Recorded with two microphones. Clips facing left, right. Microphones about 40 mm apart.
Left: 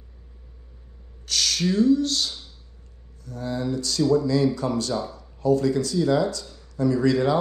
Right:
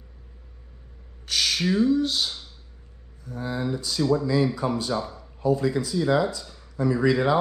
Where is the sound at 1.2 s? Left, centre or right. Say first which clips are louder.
Even; centre.